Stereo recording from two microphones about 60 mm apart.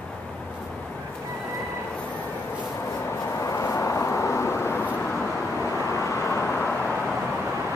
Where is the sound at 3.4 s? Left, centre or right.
Left.